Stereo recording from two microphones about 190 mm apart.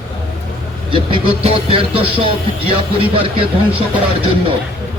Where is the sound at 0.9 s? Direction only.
30° right (ahead or behind).